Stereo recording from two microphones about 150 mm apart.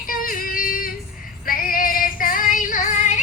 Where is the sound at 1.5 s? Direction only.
70° left (ahead or behind).